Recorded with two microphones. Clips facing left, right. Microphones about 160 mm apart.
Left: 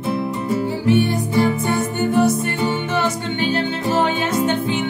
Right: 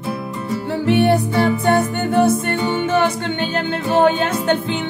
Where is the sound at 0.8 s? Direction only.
70° right (ahead or behind).